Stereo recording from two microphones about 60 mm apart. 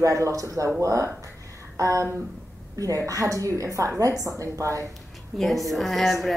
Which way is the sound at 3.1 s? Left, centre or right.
Right.